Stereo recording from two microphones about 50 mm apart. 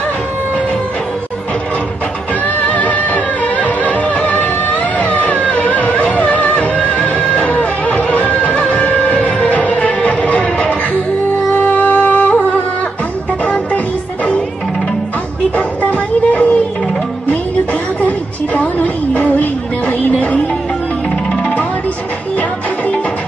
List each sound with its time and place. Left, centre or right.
2.4 s music: left
9.5 s music: left
15.5 s music: left
18.0 s a sound: left